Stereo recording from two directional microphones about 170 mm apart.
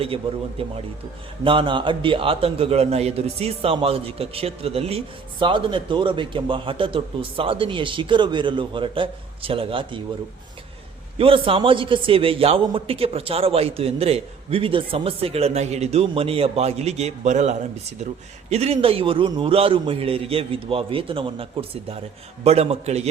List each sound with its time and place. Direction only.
0.6 s a man's voice: 35° right (ahead or behind)
11.2 s a man's voice: 30° right (ahead or behind)